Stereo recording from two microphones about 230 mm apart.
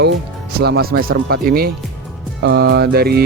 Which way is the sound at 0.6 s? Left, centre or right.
Right.